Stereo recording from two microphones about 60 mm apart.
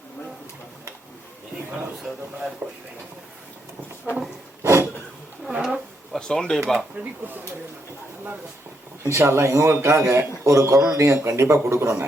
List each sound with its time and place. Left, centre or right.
2.6 s speech: right
4.6 s a sound: right
5.5 s a sound: centre
6.1 s speech: centre
6.7 s speech: right
9.0 s a man's voice: right